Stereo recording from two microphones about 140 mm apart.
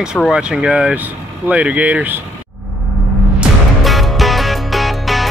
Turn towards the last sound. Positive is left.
turn(degrees=0)  # may be behind; listen again after turning